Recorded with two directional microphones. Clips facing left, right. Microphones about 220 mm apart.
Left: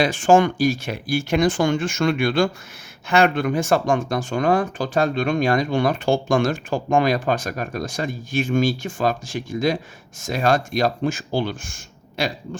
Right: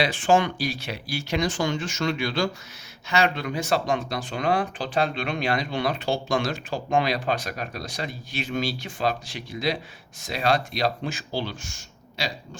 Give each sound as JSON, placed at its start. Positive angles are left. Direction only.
{"t": 0.0, "sound": "speech", "side_deg": 45}